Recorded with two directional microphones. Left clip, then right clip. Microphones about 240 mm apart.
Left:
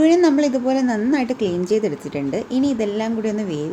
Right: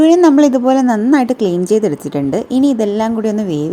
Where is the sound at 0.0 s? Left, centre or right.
Right.